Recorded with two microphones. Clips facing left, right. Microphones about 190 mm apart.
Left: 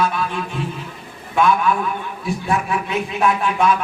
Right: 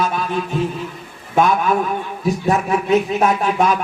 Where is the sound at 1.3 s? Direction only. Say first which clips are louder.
Right 1 dB; 40° right (ahead or behind).